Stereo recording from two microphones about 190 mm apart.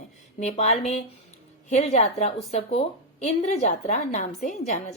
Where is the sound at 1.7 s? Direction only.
35° left (ahead or behind).